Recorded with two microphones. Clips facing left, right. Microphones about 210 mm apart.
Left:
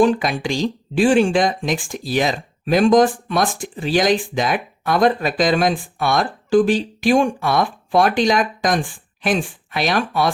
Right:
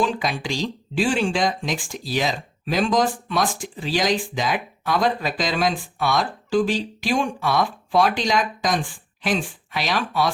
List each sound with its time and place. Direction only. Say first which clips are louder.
0.0 s speech: left 7 dB; 55° left (ahead or behind)